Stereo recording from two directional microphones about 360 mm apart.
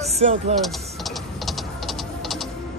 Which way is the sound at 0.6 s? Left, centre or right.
Centre.